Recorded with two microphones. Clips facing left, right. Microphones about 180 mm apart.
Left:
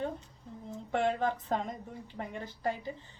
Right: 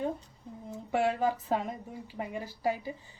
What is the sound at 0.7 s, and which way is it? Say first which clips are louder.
Speech: right 1 dB; 5° right (ahead or behind).